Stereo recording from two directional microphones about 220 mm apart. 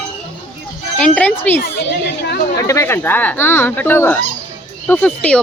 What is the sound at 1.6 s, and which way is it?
Speech, 50° left (ahead or behind).